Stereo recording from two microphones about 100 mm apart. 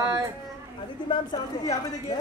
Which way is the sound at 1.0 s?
40° left (ahead or behind).